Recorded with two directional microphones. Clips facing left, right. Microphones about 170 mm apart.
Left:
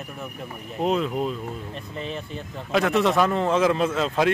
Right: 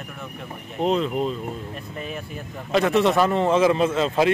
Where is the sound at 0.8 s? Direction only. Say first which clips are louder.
Right 2 dB; 5° left (ahead or behind).